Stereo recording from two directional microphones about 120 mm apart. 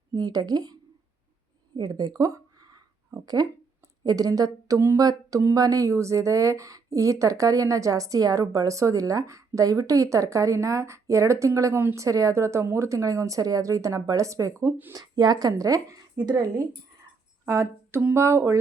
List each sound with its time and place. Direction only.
0.1 s speech: 35° right (ahead or behind)
1.7 s a sound: 35° right (ahead or behind)
4.0 s speech: 30° right (ahead or behind)
17.4 s speech: 20° right (ahead or behind)